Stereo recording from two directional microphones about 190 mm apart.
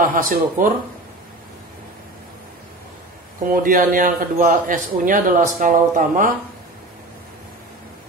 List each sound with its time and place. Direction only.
0.0 s a man's voice: 50° right (ahead or behind)
3.6 s a man's voice: 45° right (ahead or behind)